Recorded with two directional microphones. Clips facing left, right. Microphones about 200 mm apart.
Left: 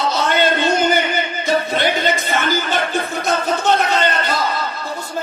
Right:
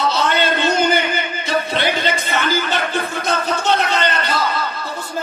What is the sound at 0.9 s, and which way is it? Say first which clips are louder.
Music: left 1 dB; 45° left (ahead or behind).